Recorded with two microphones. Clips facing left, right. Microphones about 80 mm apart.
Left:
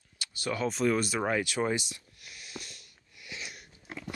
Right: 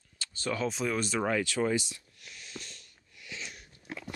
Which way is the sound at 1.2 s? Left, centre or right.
Centre.